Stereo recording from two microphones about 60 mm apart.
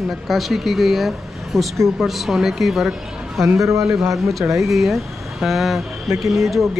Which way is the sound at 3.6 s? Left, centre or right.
Right.